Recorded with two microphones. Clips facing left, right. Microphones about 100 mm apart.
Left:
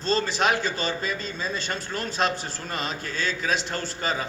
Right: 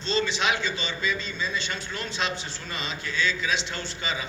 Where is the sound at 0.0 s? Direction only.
45° left (ahead or behind).